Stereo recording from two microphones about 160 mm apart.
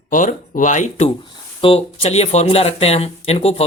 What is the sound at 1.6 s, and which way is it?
Speech, 35° left (ahead or behind).